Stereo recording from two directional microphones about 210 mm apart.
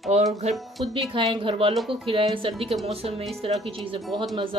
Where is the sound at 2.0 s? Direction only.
25° right (ahead or behind).